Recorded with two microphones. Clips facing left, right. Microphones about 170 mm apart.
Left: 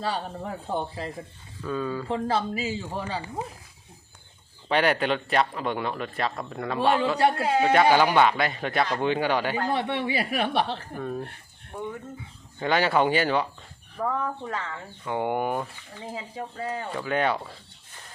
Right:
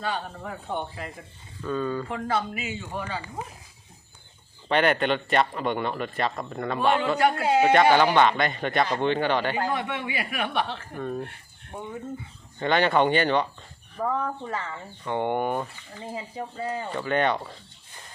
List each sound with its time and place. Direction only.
0.3 s a man's voice: 20° left (ahead or behind)
0.7 s speech: 35° left (ahead or behind)
1.6 s speech: 5° left (ahead or behind)
2.0 s speech: 30° left (ahead or behind)
4.7 s speech: centre (ahead or behind)
7.2 s a man's voice: 30° left (ahead or behind)
7.4 s speech: centre (ahead or behind)
9.7 s speech: 30° left (ahead or behind)
10.9 s speech: 5° left (ahead or behind)
11.7 s speech: 25° right (ahead or behind)
12.5 s speech: 5° left (ahead or behind)